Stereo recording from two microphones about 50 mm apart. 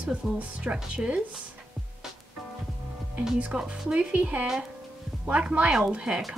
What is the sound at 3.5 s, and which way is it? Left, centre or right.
Speech, centre.